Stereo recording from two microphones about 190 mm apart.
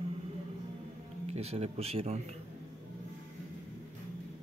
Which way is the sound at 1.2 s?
35° right (ahead or behind).